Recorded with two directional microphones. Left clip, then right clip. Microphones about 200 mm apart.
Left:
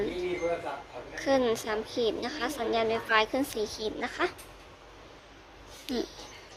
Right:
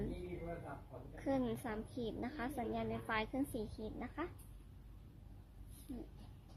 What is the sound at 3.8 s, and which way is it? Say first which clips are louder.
Speech: left 15 dB; 20° left (ahead or behind).